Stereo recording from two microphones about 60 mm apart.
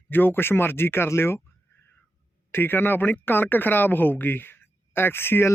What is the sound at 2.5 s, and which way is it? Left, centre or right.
Speech, left.